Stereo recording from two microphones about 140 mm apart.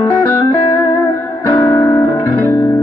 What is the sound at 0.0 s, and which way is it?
Music, 20° left (ahead or behind).